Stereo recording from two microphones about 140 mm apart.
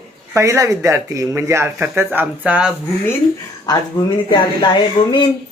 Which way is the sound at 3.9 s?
25° left (ahead or behind).